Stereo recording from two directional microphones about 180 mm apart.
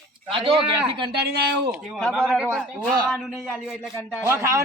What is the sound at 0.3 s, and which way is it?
Speech, 30° right (ahead or behind).